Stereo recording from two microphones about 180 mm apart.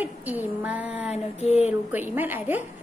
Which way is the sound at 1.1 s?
35° left (ahead or behind).